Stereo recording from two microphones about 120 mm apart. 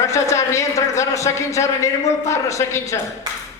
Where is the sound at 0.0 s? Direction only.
25° left (ahead or behind).